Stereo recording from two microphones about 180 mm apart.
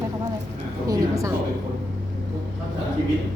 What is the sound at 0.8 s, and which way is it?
Speech, 20° right (ahead or behind).